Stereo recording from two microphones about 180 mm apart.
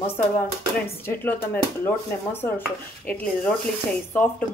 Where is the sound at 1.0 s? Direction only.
10° left (ahead or behind).